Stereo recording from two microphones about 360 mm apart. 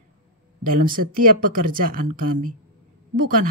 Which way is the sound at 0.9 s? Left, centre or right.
Right.